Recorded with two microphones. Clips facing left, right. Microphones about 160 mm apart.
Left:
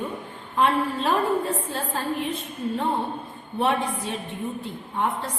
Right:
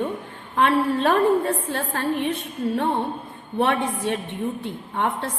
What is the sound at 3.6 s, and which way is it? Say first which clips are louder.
Speech: right 2 dB; 70° right (ahead or behind).